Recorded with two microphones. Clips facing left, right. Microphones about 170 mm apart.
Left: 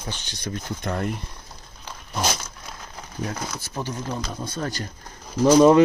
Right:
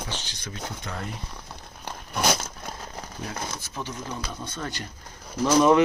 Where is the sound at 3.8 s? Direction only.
40° left (ahead or behind).